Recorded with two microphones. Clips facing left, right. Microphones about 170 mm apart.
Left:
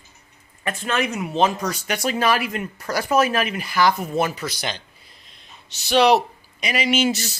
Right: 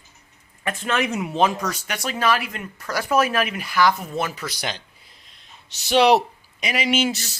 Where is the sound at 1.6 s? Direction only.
5° left (ahead or behind).